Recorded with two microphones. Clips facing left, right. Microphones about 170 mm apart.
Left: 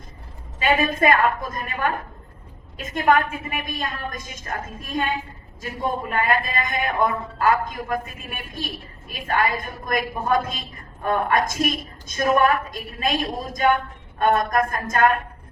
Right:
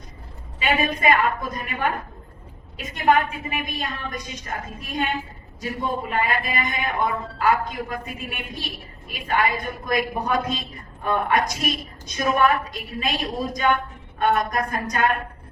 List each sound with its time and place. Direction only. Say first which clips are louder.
0.6 s a man's voice: left 2 dB; 50° left (ahead or behind)